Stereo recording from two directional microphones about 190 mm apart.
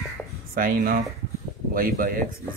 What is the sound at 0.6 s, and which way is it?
Speech, 50° right (ahead or behind).